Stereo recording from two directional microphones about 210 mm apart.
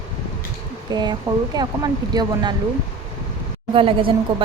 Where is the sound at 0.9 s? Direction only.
20° right (ahead or behind).